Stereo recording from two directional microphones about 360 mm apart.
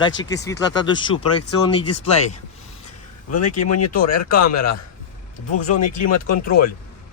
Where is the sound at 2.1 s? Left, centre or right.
Centre.